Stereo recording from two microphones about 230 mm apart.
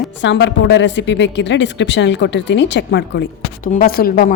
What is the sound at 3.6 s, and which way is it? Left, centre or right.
Speech, left.